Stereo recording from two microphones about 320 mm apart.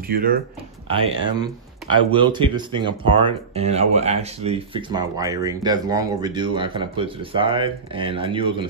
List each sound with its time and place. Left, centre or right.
0.1 s speech: right
0.8 s speech: centre